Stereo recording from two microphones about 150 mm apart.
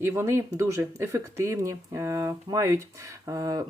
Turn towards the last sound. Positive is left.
turn(degrees=-25)  # may be behind; listen again after turning